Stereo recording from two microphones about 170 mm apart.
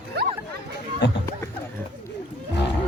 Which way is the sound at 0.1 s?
75° right (ahead or behind).